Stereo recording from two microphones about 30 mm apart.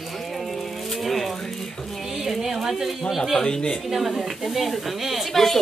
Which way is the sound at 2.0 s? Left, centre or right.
Centre.